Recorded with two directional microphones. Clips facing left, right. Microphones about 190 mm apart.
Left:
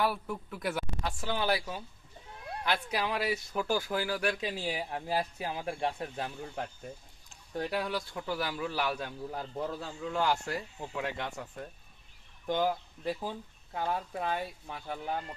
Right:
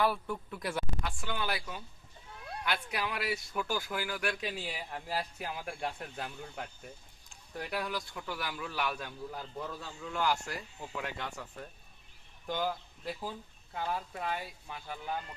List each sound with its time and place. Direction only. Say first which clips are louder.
0.0 s speech: even; 5° left (ahead or behind)
1.0 s a man's voice: left 5 dB; 30° left (ahead or behind)
12.5 s a man's voice: left 5 dB; 25° left (ahead or behind)